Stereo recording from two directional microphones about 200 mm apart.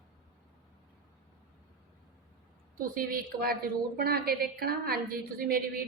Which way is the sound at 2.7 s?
45° right (ahead or behind).